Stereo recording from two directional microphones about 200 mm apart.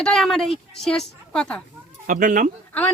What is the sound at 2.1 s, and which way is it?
Speech, 40° right (ahead or behind).